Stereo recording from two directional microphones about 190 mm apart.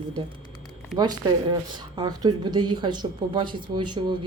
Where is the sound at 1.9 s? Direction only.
20° right (ahead or behind).